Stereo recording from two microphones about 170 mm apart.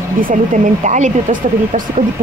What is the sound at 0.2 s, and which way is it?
Speech, 50° right (ahead or behind).